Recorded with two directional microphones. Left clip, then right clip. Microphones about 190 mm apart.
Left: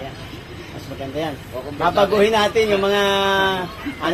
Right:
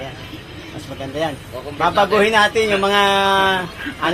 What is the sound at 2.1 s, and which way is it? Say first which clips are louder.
Speech: right 2 dB; 25° right (ahead or behind).